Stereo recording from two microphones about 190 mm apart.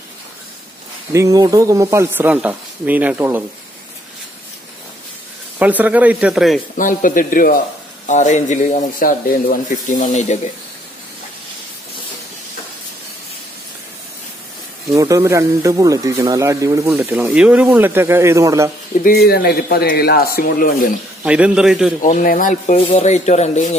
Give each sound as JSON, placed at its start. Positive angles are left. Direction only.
{"t": 1.1, "sound": "speech", "side_deg": -15}
{"t": 5.6, "sound": "speech", "side_deg": -10}
{"t": 6.8, "sound": "speech", "side_deg": 45}
{"t": 14.9, "sound": "speech", "side_deg": -15}
{"t": 19.0, "sound": "speech", "side_deg": 55}
{"t": 21.2, "sound": "a man's voice", "side_deg": -5}
{"t": 22.0, "sound": "speech", "side_deg": 45}